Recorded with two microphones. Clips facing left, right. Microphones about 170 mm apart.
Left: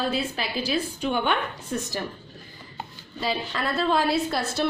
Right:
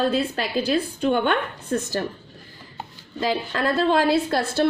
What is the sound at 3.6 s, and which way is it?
Speech, 90° right.